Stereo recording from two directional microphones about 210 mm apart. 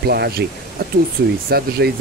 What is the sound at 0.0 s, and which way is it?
Speech, 50° right (ahead or behind).